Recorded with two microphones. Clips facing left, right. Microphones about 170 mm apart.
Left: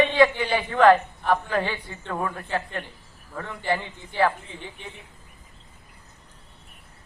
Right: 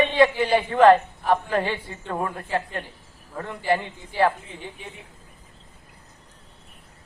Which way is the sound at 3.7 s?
25° right (ahead or behind).